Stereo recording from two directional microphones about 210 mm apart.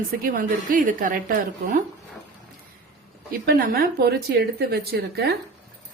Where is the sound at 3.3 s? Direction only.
45° right (ahead or behind).